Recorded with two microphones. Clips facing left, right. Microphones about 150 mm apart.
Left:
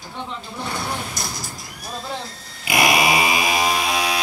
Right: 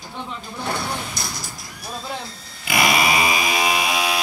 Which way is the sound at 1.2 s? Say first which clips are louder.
Left 1 dB; 50° left (ahead or behind).